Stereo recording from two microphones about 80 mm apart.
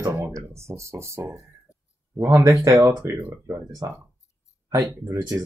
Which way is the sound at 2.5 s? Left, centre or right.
Right.